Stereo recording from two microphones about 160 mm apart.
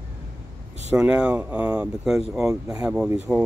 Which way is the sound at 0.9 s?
5° right (ahead or behind).